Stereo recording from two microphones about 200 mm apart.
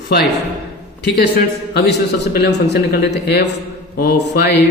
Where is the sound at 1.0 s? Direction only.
55° left (ahead or behind).